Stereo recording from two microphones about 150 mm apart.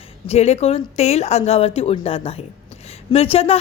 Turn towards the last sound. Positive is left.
turn(degrees=40)  # may be behind; listen again after turning